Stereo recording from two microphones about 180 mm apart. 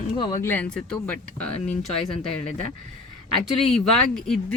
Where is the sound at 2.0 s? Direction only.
30° left (ahead or behind).